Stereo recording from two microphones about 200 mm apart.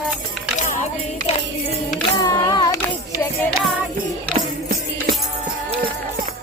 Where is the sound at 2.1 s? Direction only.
15° left (ahead or behind).